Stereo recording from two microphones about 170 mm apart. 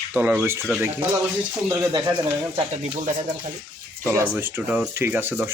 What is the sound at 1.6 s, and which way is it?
Speech, 10° right (ahead or behind).